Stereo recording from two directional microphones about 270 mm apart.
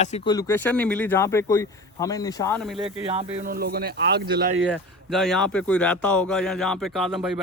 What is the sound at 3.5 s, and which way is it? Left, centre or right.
Speech, right.